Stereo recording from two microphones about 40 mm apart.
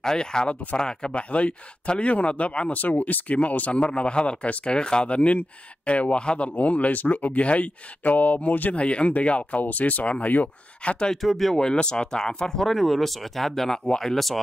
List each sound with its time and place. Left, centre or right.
0.0 s speech: centre
2.7 s speech: left
8.7 s speech: left
11.1 s speech: centre
11.5 s speech: centre